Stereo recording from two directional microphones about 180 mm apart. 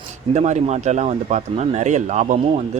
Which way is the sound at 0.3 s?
40° right (ahead or behind).